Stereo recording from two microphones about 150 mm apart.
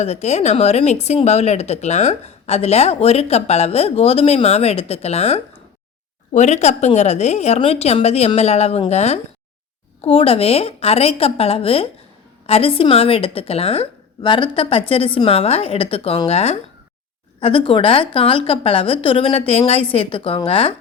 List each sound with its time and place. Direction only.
0.0 s a woman's voice: 50° left (ahead or behind)